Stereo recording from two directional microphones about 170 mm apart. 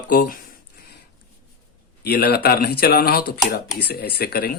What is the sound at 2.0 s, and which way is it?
A man's voice, 65° left (ahead or behind).